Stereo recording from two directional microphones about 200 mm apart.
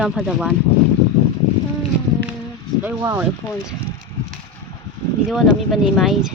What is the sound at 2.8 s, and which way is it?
Speech, 10° right (ahead or behind).